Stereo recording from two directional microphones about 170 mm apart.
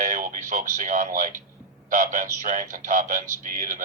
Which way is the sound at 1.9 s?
50° right (ahead or behind).